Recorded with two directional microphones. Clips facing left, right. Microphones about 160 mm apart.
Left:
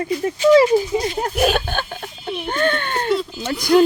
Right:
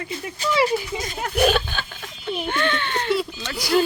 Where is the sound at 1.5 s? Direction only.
50° left (ahead or behind).